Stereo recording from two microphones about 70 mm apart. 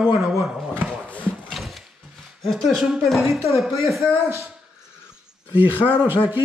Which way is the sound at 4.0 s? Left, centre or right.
Right.